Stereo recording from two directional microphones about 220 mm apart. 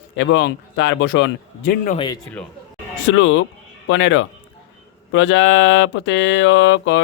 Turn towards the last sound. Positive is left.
turn(degrees=55)  # may be behind; listen again after turning